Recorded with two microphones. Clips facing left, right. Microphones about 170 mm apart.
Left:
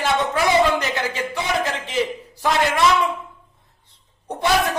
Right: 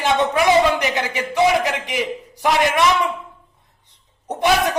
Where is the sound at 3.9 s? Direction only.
20° right (ahead or behind).